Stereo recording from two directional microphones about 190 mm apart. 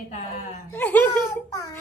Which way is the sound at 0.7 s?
10° left (ahead or behind).